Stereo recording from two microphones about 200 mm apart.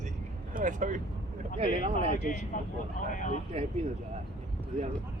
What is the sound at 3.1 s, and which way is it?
Speech, 40° left (ahead or behind).